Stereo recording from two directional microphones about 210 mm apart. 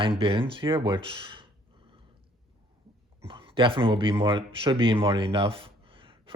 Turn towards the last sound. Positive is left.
turn(degrees=-25)  # may be behind; listen again after turning